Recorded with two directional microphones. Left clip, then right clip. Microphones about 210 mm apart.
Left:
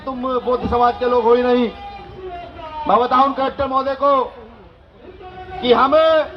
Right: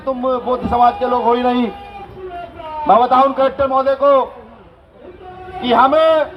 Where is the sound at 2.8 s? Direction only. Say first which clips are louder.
Right 3 dB; 40° right (ahead or behind).